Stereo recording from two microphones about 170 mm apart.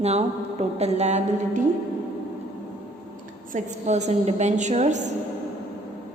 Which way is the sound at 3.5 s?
45° right (ahead or behind).